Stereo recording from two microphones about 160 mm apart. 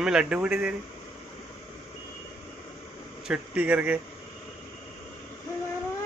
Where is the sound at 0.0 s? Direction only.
5° right (ahead or behind).